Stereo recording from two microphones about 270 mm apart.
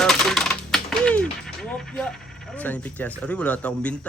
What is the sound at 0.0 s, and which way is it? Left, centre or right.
Typing, centre.